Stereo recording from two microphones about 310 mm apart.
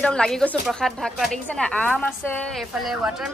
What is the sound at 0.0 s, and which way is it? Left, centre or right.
A woman's voice, centre.